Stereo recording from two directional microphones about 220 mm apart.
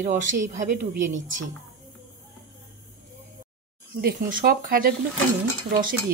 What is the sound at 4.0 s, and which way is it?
Speech, 40° right (ahead or behind).